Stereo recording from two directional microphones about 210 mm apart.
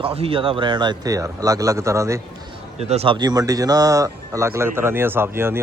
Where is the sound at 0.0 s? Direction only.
25° right (ahead or behind).